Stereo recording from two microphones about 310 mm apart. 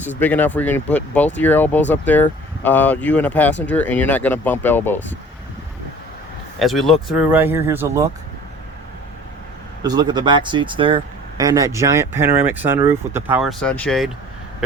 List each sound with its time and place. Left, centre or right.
0.2 s speech: centre
6.6 s speech: centre
9.8 s speech: centre